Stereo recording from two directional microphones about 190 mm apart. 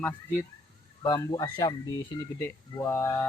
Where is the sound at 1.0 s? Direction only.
20° left (ahead or behind).